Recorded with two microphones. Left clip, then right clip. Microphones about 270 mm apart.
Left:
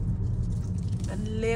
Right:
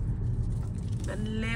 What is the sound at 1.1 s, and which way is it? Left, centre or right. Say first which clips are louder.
Speech: left 5 dB; left.